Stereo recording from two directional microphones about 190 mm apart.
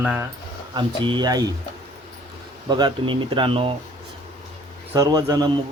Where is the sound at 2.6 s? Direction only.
20° right (ahead or behind).